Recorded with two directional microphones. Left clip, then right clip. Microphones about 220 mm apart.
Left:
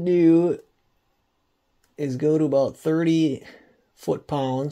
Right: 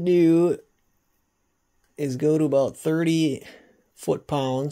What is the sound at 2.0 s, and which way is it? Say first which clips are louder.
Speech: even; 5° right (ahead or behind).